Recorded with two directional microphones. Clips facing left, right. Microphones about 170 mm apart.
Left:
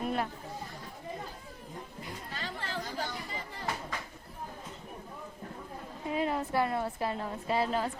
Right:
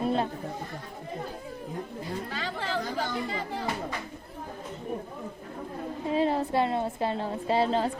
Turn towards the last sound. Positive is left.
turn(degrees=-30)  # may be behind; listen again after turning